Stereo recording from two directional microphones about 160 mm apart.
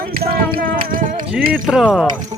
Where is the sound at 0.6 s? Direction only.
65° right (ahead or behind).